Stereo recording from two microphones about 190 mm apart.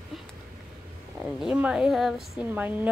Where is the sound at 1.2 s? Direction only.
5° right (ahead or behind).